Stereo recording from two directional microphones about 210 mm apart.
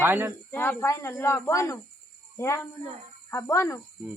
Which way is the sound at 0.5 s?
10° left (ahead or behind).